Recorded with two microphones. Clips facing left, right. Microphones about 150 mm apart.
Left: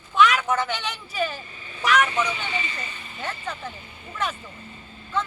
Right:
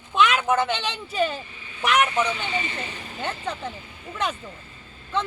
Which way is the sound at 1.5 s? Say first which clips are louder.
Left 2 dB; 40° left (ahead or behind).